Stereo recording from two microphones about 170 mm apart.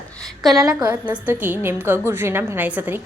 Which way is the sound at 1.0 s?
10° right (ahead or behind).